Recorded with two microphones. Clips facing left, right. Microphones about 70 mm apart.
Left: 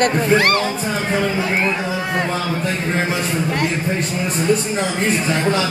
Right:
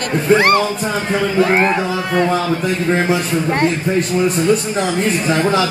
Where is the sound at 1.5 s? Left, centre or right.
Right.